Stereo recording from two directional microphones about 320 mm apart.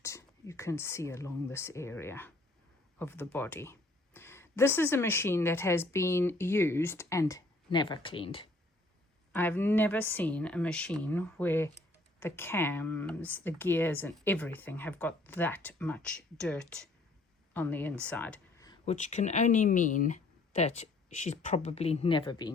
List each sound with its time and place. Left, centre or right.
0.0 s speech: centre